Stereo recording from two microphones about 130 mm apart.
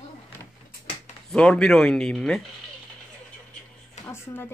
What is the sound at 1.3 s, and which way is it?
Speech, 5° left (ahead or behind).